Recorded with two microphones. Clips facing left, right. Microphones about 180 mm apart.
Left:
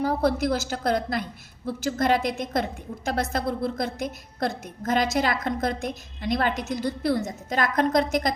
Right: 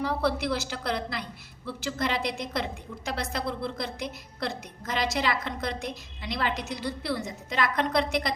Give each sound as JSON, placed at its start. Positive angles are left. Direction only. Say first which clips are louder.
{"t": 0.0, "sound": "a woman's voice", "louder": "left 4 dB", "side_deg": 45}